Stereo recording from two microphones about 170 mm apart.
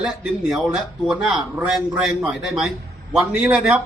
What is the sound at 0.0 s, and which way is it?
Speech, centre (ahead or behind).